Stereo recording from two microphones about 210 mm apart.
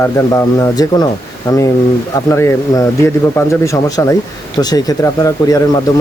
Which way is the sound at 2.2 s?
15° left (ahead or behind).